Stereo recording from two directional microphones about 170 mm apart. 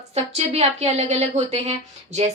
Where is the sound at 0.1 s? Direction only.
40° right (ahead or behind).